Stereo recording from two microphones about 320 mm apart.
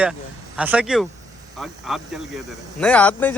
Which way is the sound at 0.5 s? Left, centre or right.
Centre.